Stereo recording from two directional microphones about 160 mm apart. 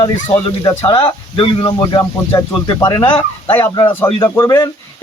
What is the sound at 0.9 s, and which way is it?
Speech, 30° left (ahead or behind).